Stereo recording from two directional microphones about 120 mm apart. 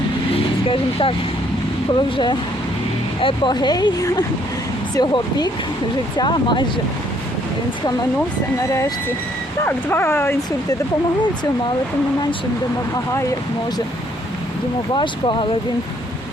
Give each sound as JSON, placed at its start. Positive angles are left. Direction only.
{"t": 0.3, "sound": "vehicle", "side_deg": 50}
{"t": 1.9, "sound": "speech", "side_deg": 40}
{"t": 9.6, "sound": "speech", "side_deg": 20}
{"t": 14.9, "sound": "speech", "side_deg": 40}